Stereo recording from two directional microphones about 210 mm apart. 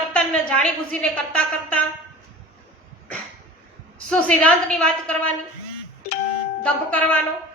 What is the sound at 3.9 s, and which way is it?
A woman's voice, 5° left (ahead or behind).